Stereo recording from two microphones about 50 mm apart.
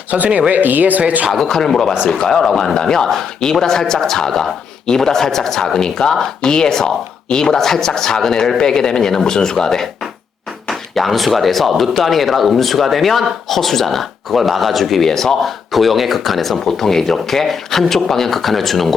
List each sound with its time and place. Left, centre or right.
0.1 s speech: centre
0.5 s speech: right
1.3 s speech: centre